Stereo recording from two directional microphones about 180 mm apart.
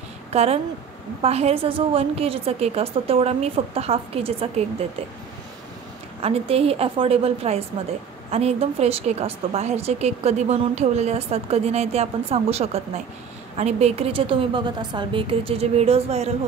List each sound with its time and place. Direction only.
0.3 s a woman's voice: 35° right (ahead or behind)
6.2 s a woman's voice: 35° right (ahead or behind)